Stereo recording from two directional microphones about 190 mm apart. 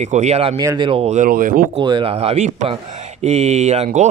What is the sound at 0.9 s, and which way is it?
Speech, 35° right (ahead or behind).